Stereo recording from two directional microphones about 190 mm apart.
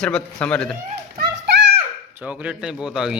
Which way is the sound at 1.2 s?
55° right (ahead or behind).